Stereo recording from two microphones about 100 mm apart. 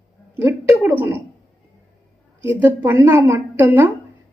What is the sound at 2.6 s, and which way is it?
A woman's voice, 20° right (ahead or behind).